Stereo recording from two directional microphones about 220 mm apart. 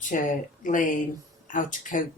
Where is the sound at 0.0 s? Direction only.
35° left (ahead or behind).